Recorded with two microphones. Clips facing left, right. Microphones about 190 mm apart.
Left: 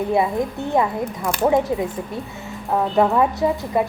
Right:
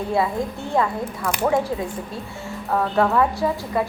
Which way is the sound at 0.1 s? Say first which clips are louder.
Even; 20° left (ahead or behind).